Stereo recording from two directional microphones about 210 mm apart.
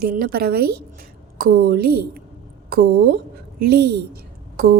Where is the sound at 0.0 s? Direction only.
45° right (ahead or behind).